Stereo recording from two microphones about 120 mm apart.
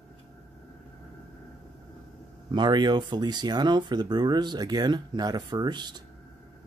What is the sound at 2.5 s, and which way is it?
Speech, 40° right (ahead or behind).